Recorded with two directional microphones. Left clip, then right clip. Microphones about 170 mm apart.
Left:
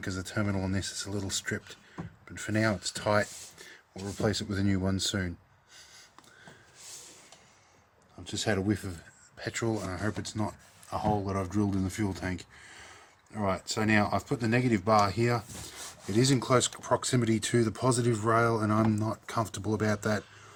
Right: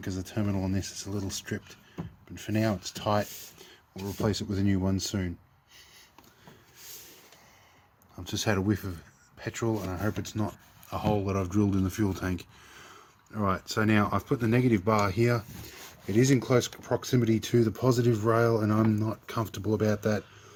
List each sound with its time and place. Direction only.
0.0 s speech: 10° left (ahead or behind)
8.2 s speech: 30° right (ahead or behind)
8.4 s speech: 10° right (ahead or behind)